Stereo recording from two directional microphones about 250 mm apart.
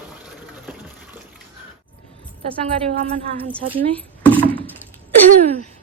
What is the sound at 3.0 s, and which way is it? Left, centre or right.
Speech, right.